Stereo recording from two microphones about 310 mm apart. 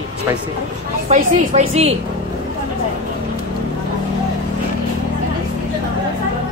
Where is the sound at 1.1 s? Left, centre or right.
Right.